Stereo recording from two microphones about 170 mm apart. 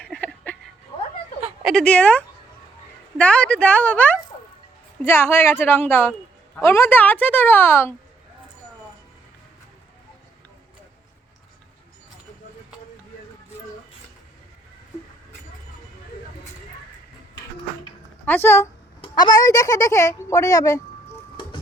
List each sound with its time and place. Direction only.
0.0 s a sound: 5° left (ahead or behind)
1.6 s a woman's voice: 5° left (ahead or behind)
18.3 s a woman's voice: 15° left (ahead or behind)
19.0 s speech: 25° left (ahead or behind)